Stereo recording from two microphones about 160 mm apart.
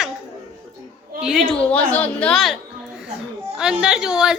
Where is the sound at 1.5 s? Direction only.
5° left (ahead or behind).